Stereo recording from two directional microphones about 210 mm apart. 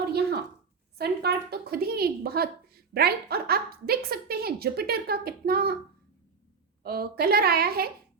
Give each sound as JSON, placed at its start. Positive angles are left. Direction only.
{"t": 0.1, "sound": "a sound", "side_deg": -50}
{"t": 0.9, "sound": "a woman's voice", "side_deg": -50}
{"t": 6.8, "sound": "a woman's voice", "side_deg": -45}